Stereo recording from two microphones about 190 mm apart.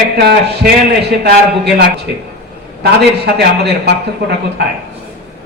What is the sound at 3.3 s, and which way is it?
Speech, 60° right (ahead or behind).